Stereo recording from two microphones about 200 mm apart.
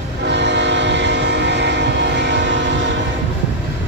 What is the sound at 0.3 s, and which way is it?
Train, 60° right (ahead or behind).